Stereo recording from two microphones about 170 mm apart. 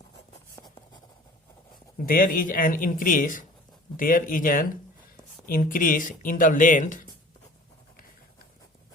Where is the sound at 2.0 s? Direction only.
55° left (ahead or behind).